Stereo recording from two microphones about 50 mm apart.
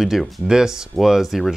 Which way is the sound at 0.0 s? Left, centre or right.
Centre.